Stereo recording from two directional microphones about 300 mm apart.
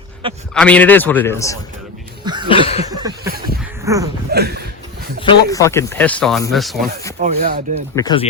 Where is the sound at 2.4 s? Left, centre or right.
Centre.